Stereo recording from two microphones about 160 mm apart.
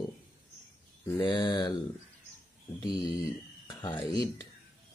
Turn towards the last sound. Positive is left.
turn(degrees=20)  # may be behind; listen again after turning